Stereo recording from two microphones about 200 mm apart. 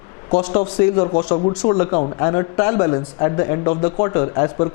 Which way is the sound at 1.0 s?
25° left (ahead or behind).